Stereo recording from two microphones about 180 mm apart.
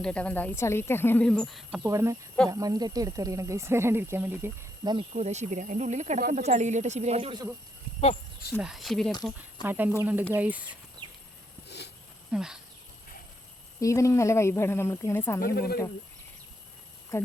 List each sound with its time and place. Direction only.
0.0 s speech: 5° left (ahead or behind)
1.9 s speech: 15° right (ahead or behind)
4.9 s speech: 35° right (ahead or behind)
8.5 s speech: centre (ahead or behind)
9.6 s speech: 10° right (ahead or behind)
12.3 s speech: 5° right (ahead or behind)
13.7 s speech: 15° left (ahead or behind)
15.4 s speech: 55° left (ahead or behind)